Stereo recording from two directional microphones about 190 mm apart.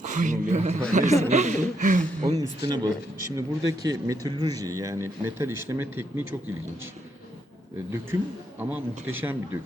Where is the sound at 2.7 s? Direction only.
20° right (ahead or behind).